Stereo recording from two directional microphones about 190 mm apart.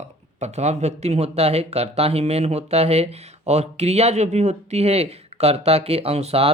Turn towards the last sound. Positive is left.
turn(degrees=-35)  # may be behind; listen again after turning